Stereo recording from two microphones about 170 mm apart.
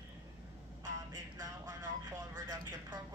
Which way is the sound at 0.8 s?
20° right (ahead or behind).